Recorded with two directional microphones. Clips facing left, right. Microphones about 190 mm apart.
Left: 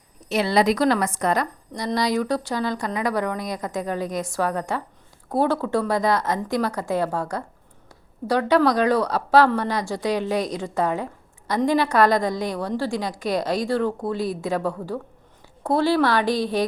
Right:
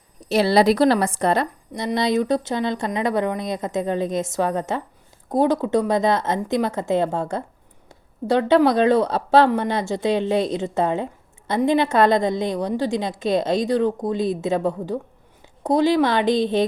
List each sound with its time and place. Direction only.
0.3 s a woman's voice: 35° right (ahead or behind)